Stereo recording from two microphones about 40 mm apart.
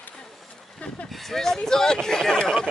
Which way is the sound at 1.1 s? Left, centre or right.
Centre.